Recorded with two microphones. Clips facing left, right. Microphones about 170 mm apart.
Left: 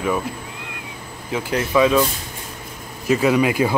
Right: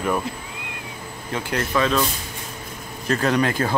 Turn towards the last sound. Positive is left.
turn(degrees=10)  # may be behind; listen again after turning